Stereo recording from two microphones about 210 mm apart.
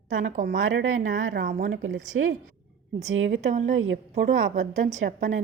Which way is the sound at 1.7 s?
70° right (ahead or behind).